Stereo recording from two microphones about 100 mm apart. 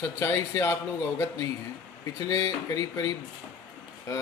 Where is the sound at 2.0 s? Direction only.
40° left (ahead or behind).